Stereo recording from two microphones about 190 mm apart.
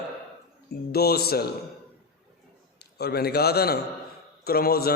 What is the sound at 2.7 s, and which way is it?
A man's voice, 55° left (ahead or behind).